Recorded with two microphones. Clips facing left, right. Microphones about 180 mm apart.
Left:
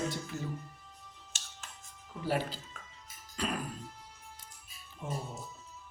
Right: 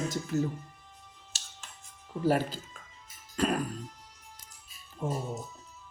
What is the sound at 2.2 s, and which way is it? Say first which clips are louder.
Speech: right 6 dB; 45° right (ahead or behind).